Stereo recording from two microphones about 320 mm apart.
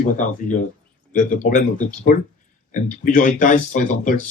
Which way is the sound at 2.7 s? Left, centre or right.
Left.